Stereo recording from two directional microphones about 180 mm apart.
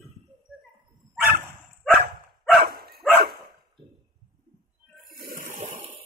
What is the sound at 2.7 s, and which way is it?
Dog, 60° right (ahead or behind).